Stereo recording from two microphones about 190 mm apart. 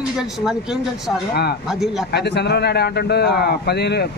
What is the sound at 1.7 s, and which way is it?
Speech, centre (ahead or behind).